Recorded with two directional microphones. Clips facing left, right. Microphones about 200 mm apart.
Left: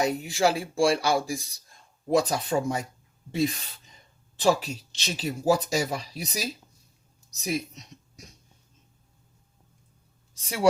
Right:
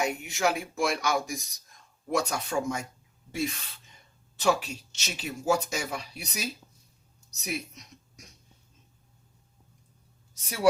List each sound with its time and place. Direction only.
0.0 s speech: 35° left (ahead or behind)